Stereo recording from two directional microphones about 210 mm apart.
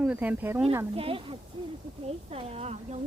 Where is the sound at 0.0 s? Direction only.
5° right (ahead or behind).